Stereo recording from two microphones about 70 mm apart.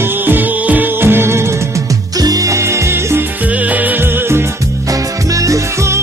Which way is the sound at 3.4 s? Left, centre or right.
Right.